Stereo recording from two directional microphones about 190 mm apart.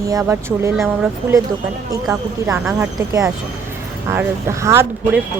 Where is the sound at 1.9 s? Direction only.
15° right (ahead or behind).